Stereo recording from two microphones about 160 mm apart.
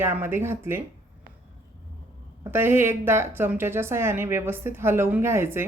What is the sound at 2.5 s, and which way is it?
Speech, 15° right (ahead or behind).